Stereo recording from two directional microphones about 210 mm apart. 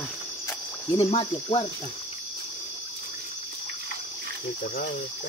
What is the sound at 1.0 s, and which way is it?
Cricket, 25° left (ahead or behind).